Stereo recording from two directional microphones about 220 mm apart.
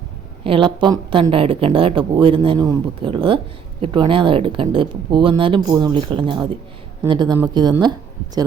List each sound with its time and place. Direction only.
0.4 s a woman's voice: 20° right (ahead or behind)